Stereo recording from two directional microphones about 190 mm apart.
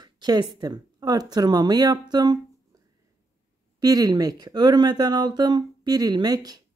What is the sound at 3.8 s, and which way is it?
Speech, 20° right (ahead or behind).